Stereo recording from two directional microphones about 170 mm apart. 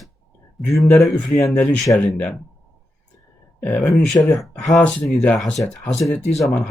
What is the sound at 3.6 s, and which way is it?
Speech, 10° left (ahead or behind).